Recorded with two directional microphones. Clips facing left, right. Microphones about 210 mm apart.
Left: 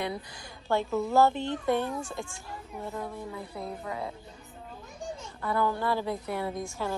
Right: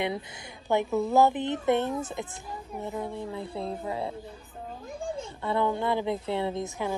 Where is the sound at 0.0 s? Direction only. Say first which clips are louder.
Right 3 dB; 20° right (ahead or behind).